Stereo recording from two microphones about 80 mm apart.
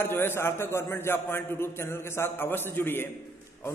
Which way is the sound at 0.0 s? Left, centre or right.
Left.